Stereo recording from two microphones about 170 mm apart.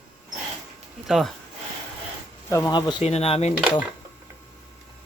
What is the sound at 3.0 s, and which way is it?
Speech, 40° left (ahead or behind).